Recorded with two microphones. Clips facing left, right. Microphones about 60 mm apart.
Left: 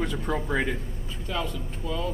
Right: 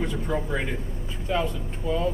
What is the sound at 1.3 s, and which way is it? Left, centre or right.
Speech, right.